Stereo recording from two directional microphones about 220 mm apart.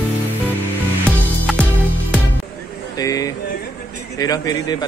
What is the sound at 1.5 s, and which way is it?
Music, centre (ahead or behind).